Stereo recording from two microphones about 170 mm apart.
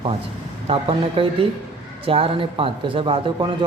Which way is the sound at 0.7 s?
30° right (ahead or behind).